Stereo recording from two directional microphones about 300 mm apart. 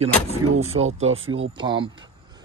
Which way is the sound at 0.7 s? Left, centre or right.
Right.